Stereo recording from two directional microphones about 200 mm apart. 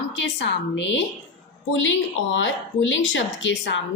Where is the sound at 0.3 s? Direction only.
65° left (ahead or behind).